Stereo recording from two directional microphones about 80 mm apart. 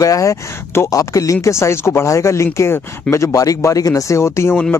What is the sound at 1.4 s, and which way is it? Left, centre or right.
Speech, left.